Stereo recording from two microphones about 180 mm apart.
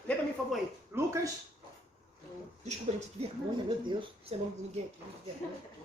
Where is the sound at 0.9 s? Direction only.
15° right (ahead or behind).